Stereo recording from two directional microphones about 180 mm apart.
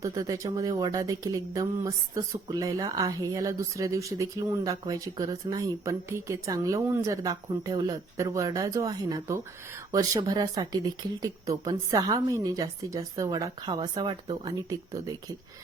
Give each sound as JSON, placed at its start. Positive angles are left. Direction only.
{"t": 0.0, "sound": "speech", "side_deg": -20}